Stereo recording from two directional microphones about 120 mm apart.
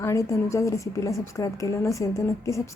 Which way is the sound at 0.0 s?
25° left (ahead or behind).